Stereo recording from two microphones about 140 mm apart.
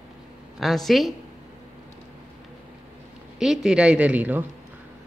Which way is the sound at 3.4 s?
5° right (ahead or behind).